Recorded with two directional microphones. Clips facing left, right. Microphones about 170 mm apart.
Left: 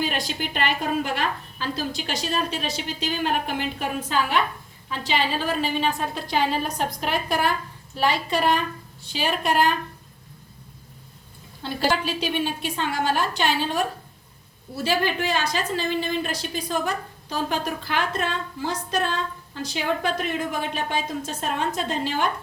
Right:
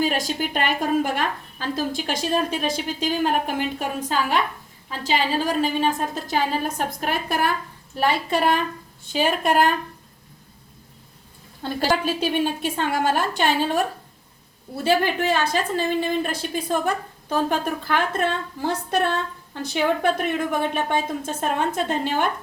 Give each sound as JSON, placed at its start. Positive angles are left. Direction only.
{"t": 0.0, "sound": "a woman's voice", "side_deg": -45}
{"t": 11.6, "sound": "a woman's voice", "side_deg": -50}
{"t": 14.8, "sound": "a woman's voice", "side_deg": -55}